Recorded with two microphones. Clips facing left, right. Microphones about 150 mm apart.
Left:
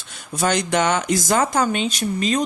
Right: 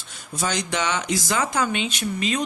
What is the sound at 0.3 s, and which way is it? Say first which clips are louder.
Speech: left 6 dB; 55° left (ahead or behind).